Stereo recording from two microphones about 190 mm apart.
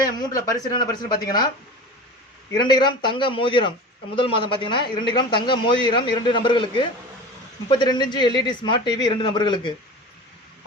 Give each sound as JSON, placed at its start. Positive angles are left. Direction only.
{"t": 0.2, "sound": "a man's voice", "side_deg": 20}
{"t": 2.5, "sound": "a man's voice", "side_deg": 25}